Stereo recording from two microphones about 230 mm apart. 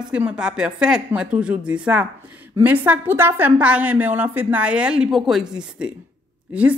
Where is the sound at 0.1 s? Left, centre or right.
Centre.